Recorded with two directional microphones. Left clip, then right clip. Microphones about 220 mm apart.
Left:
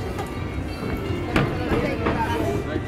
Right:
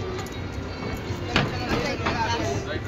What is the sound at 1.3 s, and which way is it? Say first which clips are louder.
Music: left 1 dB; 50° right (ahead or behind).